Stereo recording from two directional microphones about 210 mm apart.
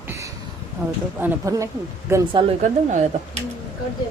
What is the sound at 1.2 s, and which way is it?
Speech, 10° right (ahead or behind).